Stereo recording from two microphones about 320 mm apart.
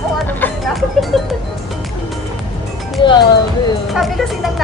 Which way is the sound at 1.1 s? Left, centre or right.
Centre.